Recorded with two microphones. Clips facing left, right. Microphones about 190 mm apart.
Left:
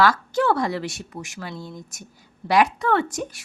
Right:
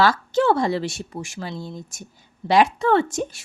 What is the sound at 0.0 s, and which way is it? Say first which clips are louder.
Speech: right 1 dB; 25° right (ahead or behind).